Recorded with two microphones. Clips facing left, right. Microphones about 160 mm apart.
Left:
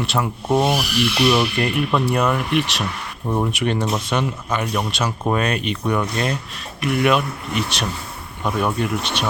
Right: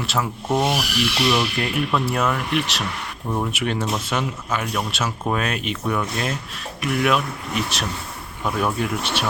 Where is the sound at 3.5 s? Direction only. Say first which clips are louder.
Left 3 dB; 5° right (ahead or behind).